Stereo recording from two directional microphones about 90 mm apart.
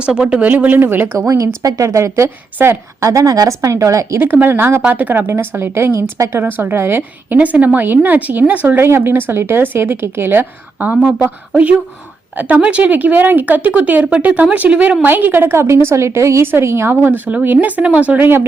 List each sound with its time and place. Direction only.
0.0 s a woman's voice: 10° right (ahead or behind); by 3.1 s 30° right (ahead or behind)
3.1 s a woman's voice: 40° right (ahead or behind)
4.2 s a woman's voice: 20° right (ahead or behind)
6.4 s a woman's voice: 25° right (ahead or behind)